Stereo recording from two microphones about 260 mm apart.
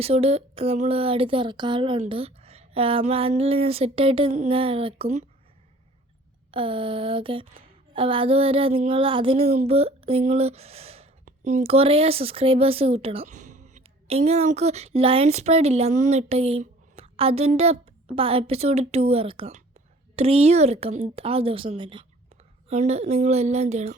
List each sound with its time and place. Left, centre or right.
0.0 s speech: right
6.5 s speech: centre